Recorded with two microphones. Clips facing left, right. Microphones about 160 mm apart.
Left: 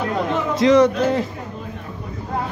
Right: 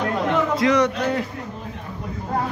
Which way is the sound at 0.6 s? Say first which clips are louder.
Left 10 dB; 25° left (ahead or behind).